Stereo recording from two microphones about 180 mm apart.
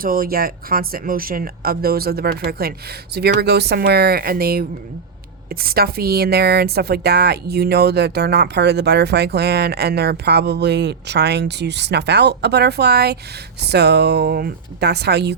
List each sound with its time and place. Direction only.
0.0 s speech: 55° right (ahead or behind)